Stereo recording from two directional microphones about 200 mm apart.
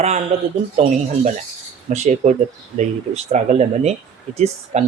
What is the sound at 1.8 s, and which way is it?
Speech, 35° right (ahead or behind).